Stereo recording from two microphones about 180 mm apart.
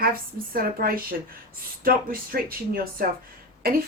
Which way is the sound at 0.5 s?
55° right (ahead or behind).